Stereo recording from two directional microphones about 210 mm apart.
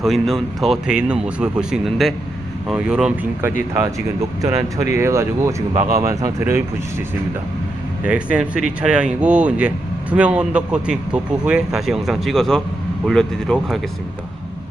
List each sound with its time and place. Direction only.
0.0 s speech: centre (ahead or behind)
4.4 s speech: 15° right (ahead or behind)
8.0 s speech: 5° right (ahead or behind)